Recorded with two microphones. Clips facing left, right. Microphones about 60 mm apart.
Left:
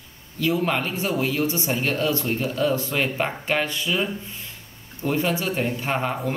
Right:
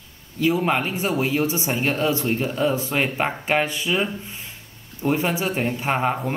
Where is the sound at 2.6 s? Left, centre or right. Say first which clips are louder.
Even; right.